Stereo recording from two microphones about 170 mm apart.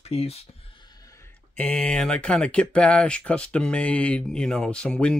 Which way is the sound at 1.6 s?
10° left (ahead or behind).